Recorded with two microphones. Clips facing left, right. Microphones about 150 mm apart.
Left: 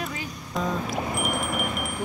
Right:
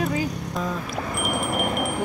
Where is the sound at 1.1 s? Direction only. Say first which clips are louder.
Right 2 dB; centre (ahead or behind).